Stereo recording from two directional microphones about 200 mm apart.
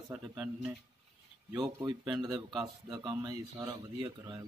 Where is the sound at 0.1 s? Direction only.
10° right (ahead or behind).